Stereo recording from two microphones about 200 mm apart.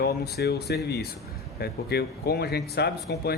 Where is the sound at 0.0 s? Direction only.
55° left (ahead or behind).